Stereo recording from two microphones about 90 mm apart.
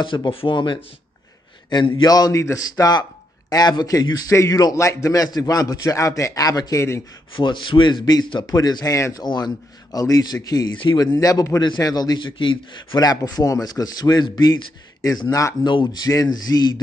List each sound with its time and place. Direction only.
0.0 s a man's voice: 65° left (ahead or behind); by 2.7 s 35° left (ahead or behind)
2.8 s a man's voice: 45° left (ahead or behind)
4.3 s a man's voice: 35° left (ahead or behind)
7.3 s a man's voice: 65° left (ahead or behind)
8.0 s a man's voice: 50° left (ahead or behind)
8.9 s speech: 35° left (ahead or behind)
9.2 s a man's voice: 50° left (ahead or behind)
11.6 s a man's voice: 50° left (ahead or behind)
12.9 s a man's voice: 45° left (ahead or behind)
15.2 s speech: 35° left (ahead or behind)
15.6 s a man's voice: 55° left (ahead or behind)
16.1 s a man's voice: 45° left (ahead or behind)